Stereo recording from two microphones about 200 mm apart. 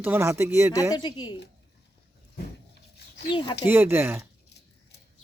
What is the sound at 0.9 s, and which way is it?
Speech, 20° left (ahead or behind).